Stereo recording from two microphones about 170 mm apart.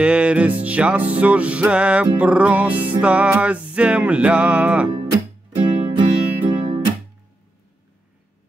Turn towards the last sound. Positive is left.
turn(degrees=-30)  # may be behind; listen again after turning